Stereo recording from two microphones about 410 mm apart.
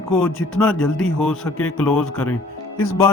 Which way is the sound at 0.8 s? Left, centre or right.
Left.